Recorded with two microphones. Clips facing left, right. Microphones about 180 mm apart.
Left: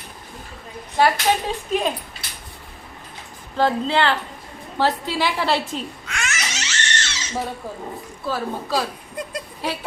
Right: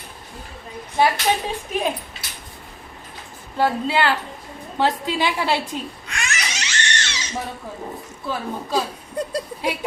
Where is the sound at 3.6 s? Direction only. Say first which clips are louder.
Left 1 dB; 10° right (ahead or behind).